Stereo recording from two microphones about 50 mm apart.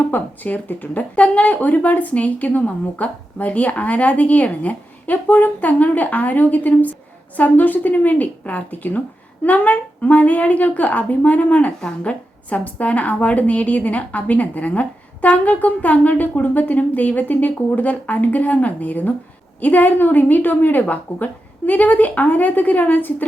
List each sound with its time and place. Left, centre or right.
0.1 s a woman's voice: left